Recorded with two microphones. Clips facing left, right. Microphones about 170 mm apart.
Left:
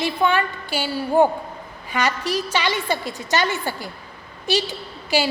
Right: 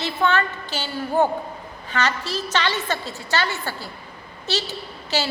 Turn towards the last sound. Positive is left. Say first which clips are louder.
# left 4 dB
turn(degrees=15)  # may be behind; listen again after turning